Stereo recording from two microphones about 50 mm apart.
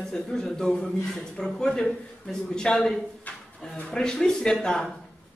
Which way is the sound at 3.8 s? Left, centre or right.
Centre.